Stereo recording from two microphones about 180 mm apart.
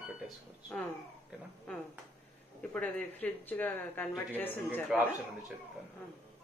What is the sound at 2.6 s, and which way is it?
Speech, 5° left (ahead or behind).